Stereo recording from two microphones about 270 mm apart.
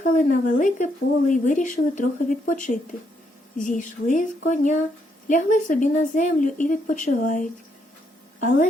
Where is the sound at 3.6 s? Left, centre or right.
Left.